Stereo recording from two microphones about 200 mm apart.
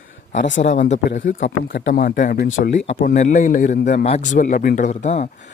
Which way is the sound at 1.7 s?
50° left (ahead or behind).